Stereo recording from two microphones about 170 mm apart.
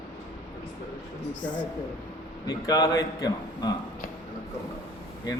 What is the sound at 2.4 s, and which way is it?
A man's voice, 20° left (ahead or behind).